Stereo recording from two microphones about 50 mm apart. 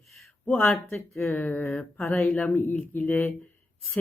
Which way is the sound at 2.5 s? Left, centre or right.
Left.